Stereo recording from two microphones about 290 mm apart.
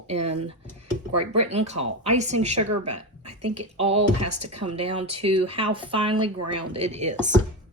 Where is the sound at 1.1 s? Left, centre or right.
Right.